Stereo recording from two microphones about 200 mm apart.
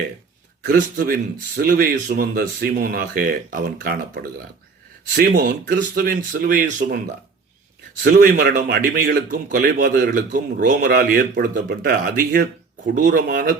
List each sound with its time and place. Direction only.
0.6 s speech: 50° right (ahead or behind)
8.0 s speech: 45° right (ahead or behind)
13.0 s speech: 40° right (ahead or behind)